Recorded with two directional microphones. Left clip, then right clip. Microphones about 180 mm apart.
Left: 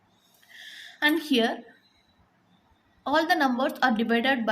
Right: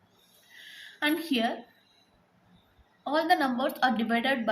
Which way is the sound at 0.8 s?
30° left (ahead or behind).